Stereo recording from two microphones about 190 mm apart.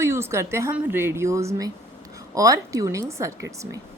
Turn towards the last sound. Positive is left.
turn(degrees=-15)  # may be behind; listen again after turning